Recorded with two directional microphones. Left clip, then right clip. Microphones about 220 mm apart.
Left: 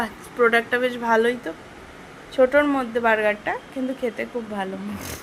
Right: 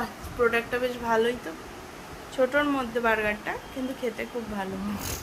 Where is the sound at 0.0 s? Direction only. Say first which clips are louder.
Left 6 dB; 30° left (ahead or behind).